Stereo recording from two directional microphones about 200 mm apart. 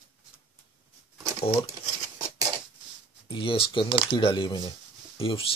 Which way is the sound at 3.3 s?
25° left (ahead or behind).